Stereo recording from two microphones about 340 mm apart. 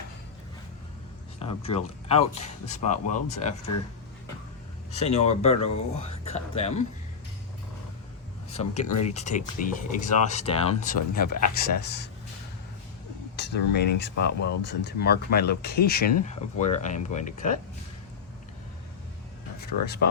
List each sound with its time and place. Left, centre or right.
1.4 s speech: centre
4.9 s speech: centre
8.5 s speech: centre
11.3 s speech: left
11.5 s speech: left
13.3 s speech: left
19.5 s a sound: left